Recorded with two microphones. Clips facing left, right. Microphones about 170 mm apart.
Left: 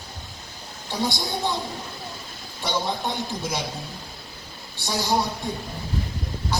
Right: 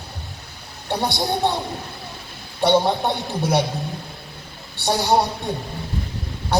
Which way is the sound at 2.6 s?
60° right (ahead or behind).